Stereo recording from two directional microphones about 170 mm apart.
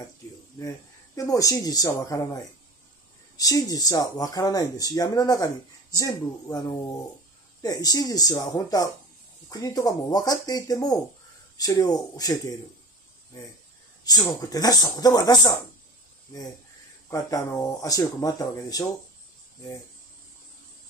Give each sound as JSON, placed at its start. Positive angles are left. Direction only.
{"t": 0.6, "sound": "speech", "side_deg": 20}
{"t": 14.0, "sound": "speech", "side_deg": 20}
{"t": 17.1, "sound": "speech", "side_deg": 20}